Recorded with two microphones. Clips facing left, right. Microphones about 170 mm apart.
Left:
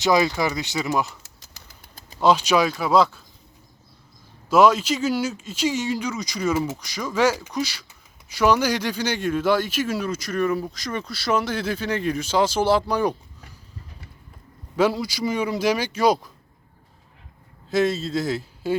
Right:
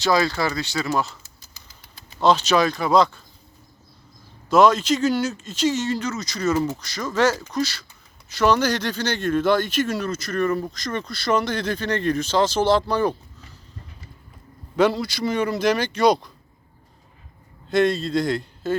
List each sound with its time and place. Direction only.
0.0 s speech: 20° left (ahead or behind)
1.2 s a sound: 75° left (ahead or behind)
2.2 s speech: 10° left (ahead or behind)
4.4 s speech: 10° left (ahead or behind)
14.8 s speech: 10° left (ahead or behind)
17.7 s a man's voice: centre (ahead or behind)